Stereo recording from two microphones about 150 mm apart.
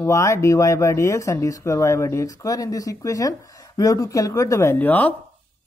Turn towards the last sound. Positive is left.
turn(degrees=10)  # may be behind; listen again after turning